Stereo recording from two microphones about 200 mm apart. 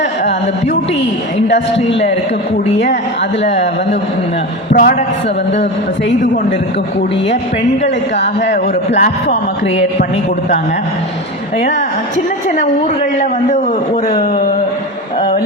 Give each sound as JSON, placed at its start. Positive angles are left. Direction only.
{"t": 1.9, "sound": "speech", "side_deg": 60}
{"t": 4.7, "sound": "a man's voice", "side_deg": 45}
{"t": 8.2, "sound": "speech", "side_deg": 60}
{"t": 9.0, "sound": "speech", "side_deg": 40}
{"t": 14.1, "sound": "speech", "side_deg": 40}